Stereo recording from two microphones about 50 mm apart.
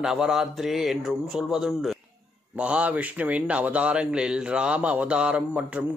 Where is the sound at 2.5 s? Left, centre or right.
Right.